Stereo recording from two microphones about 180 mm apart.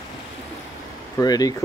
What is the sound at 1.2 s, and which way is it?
Speech, 20° left (ahead or behind).